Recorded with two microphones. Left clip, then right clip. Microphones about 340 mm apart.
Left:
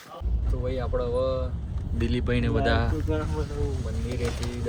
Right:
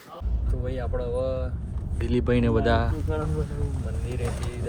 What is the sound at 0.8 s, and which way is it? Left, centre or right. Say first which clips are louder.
Speech: left 2 dB; centre.